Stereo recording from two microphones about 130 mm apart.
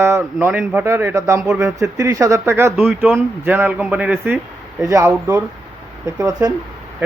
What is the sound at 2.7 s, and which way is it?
Speech, centre (ahead or behind).